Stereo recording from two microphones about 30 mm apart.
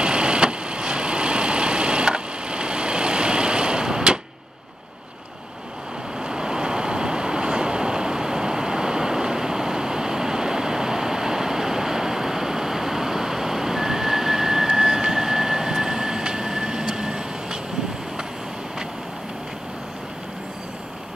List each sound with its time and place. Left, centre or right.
0.0 s vehicle: right
6.2 s vehicle: right